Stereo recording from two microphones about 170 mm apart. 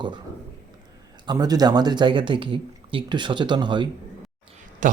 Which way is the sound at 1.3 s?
20° right (ahead or behind).